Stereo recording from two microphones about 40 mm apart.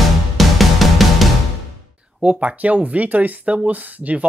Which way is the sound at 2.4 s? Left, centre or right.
Right.